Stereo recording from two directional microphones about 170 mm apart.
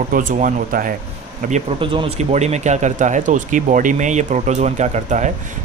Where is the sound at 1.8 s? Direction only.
30° right (ahead or behind).